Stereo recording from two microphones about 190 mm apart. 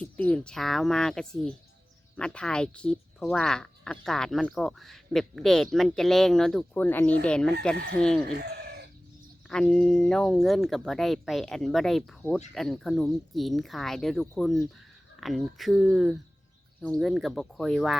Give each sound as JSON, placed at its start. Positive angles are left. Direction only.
{"t": 0.0, "sound": "speech", "side_deg": 5}
{"t": 8.3, "sound": "chicken", "side_deg": -60}
{"t": 9.5, "sound": "speech", "side_deg": 5}